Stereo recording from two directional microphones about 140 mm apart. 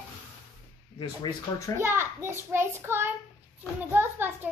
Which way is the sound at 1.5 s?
25° left (ahead or behind).